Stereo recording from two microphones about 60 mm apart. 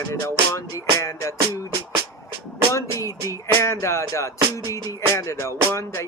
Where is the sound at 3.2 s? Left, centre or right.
Left.